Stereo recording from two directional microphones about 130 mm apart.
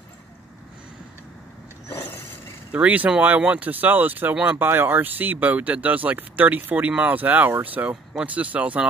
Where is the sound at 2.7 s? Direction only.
10° right (ahead or behind).